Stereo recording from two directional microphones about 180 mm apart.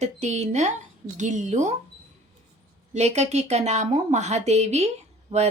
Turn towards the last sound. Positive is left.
turn(degrees=-35)  # may be behind; listen again after turning